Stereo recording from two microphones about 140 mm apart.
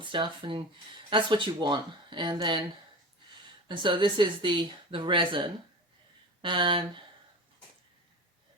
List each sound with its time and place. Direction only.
0.0 s speech: 35° right (ahead or behind)
3.7 s speech: 35° right (ahead or behind)